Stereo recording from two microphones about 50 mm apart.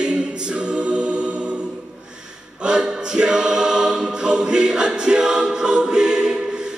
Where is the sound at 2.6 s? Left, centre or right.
Centre.